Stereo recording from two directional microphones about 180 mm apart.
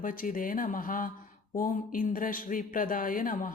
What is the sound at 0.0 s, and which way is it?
Speech, 50° left (ahead or behind).